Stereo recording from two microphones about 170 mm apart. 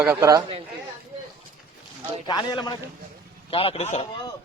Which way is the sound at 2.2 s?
25° left (ahead or behind).